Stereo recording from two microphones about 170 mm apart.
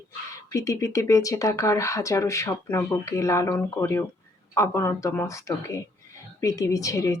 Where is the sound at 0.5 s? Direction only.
20° left (ahead or behind).